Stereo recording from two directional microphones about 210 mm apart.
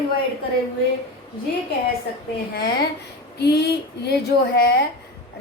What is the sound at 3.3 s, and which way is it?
Speech, 50° left (ahead or behind).